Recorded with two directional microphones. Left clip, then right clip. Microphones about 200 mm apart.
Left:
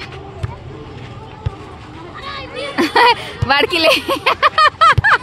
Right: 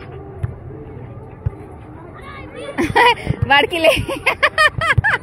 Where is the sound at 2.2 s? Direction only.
10° left (ahead or behind).